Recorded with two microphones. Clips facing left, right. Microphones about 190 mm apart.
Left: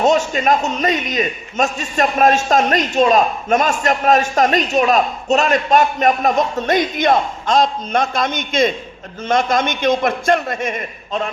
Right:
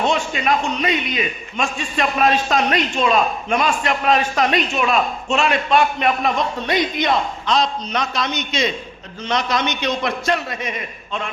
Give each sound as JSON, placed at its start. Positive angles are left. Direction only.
{"t": 0.0, "sound": "a man's voice", "side_deg": 40}